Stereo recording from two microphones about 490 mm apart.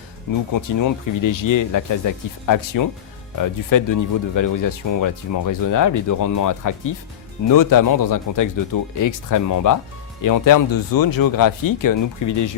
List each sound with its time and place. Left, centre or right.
0.5 s speech: left